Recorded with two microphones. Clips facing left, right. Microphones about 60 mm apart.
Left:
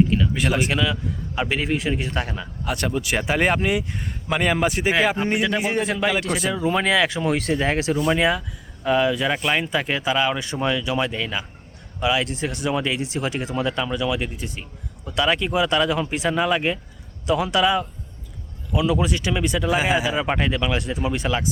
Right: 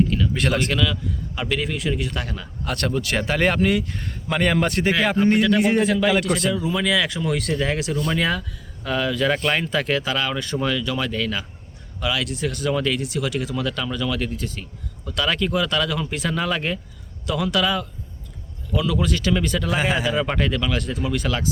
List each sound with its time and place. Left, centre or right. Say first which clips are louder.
0.3 s speech: even; centre; by 2.5 s left
2.6 s speech: even; centre
5.5 s a man's voice: right 4 dB; centre
5.8 s speech: right 3 dB; left
7.9 s speech: left 3 dB; centre